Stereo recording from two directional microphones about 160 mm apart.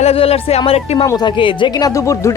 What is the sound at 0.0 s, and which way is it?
Speech, 40° left (ahead or behind).